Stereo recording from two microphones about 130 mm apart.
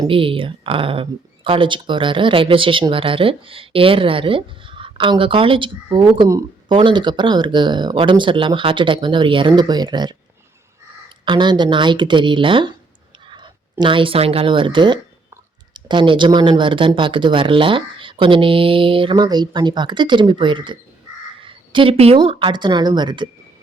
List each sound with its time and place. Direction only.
0.1 s speech: 45° right (ahead or behind)
11.3 s speech: 35° right (ahead or behind)
21.4 s a sound: 40° right (ahead or behind)
22.2 s speech: 45° right (ahead or behind)